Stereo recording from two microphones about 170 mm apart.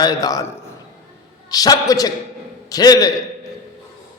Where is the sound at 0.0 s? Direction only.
20° left (ahead or behind).